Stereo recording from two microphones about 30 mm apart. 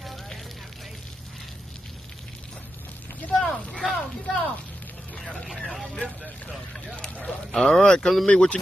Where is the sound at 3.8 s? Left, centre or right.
Centre.